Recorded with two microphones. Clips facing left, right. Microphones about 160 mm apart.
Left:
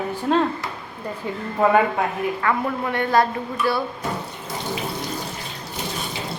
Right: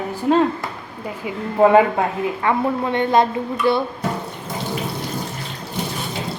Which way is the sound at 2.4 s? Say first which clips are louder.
Right 5 dB; 20° right (ahead or behind).